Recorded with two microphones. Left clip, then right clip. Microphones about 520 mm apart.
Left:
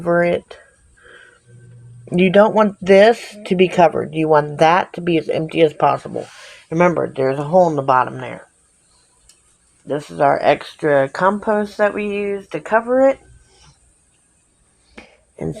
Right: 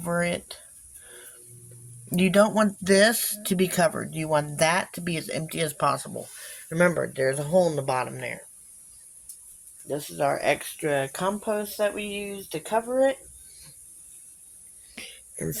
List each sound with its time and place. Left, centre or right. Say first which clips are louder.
0.0 s speech: left 11 dB; right
2.1 s speech: left 9 dB; right
9.8 s speech: left 10 dB; right
14.9 s whispering: left 5 dB; right